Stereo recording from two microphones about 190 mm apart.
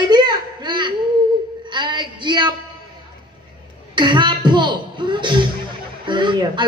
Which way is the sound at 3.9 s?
25° right (ahead or behind).